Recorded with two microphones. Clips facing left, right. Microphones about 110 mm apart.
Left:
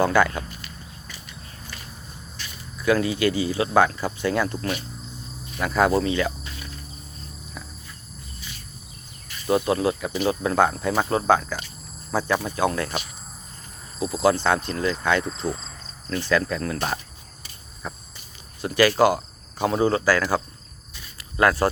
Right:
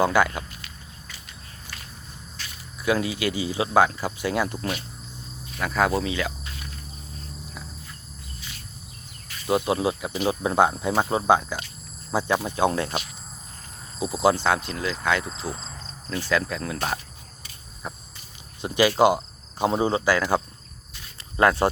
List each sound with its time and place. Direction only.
0.0 s speech: 15° right (ahead or behind)
2.8 s speech: 10° right (ahead or behind)
5.5 s speech: centre (ahead or behind)
9.5 s speech: 15° right (ahead or behind)
14.0 s speech: 20° right (ahead or behind)
17.8 s cricket: 15° right (ahead or behind)
18.6 s speech: 20° right (ahead or behind)